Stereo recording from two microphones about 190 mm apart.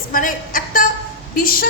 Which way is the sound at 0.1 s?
45° left (ahead or behind).